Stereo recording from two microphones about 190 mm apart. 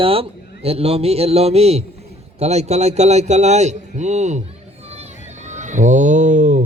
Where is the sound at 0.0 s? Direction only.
30° right (ahead or behind).